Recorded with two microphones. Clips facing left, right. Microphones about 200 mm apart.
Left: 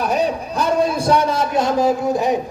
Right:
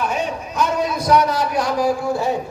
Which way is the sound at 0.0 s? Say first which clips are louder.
Left 4 dB; 35° left (ahead or behind).